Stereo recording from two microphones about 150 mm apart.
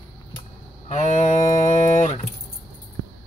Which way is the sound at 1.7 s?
50° left (ahead or behind).